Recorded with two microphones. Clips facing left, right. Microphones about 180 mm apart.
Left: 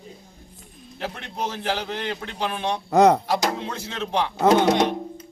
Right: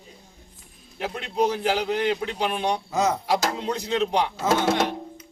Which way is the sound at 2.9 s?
60° left (ahead or behind).